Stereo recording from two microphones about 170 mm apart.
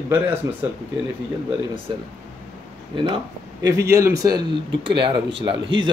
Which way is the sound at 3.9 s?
20° right (ahead or behind).